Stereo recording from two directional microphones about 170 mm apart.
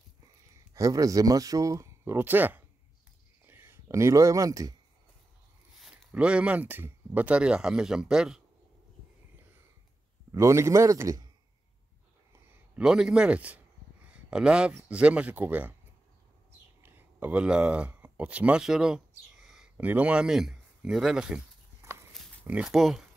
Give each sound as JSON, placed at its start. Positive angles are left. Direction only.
{"t": 0.7, "sound": "speech", "side_deg": -20}
{"t": 5.8, "sound": "speech", "side_deg": -5}
{"t": 10.3, "sound": "speech", "side_deg": -15}
{"t": 12.3, "sound": "a man's voice", "side_deg": -5}
{"t": 16.8, "sound": "speech", "side_deg": -10}
{"t": 22.4, "sound": "speech", "side_deg": -5}